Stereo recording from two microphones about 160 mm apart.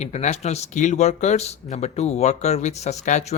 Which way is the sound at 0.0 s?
45° left (ahead or behind).